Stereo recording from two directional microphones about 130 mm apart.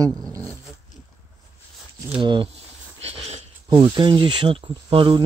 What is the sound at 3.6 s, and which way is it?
Speech, 35° right (ahead or behind).